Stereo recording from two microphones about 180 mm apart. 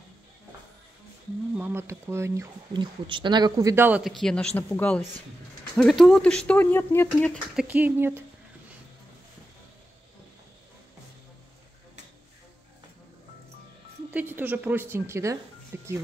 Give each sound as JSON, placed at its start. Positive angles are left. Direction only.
{"t": 1.5, "sound": "speech", "side_deg": -10}
{"t": 4.0, "sound": "speech", "side_deg": 0}
{"t": 7.5, "sound": "speech", "side_deg": -10}
{"t": 14.1, "sound": "speech", "side_deg": -10}